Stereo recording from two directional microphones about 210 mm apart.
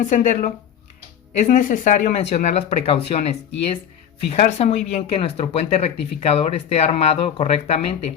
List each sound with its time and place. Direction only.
0.0 s speech: 35° left (ahead or behind)